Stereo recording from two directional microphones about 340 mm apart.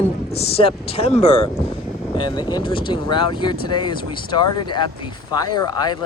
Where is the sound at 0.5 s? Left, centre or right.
Centre.